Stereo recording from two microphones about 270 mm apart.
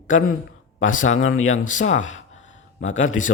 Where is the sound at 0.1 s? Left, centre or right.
Left.